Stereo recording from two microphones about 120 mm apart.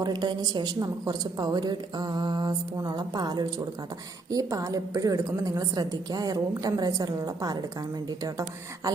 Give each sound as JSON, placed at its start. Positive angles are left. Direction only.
{"t": 0.0, "sound": "a woman's voice", "side_deg": -35}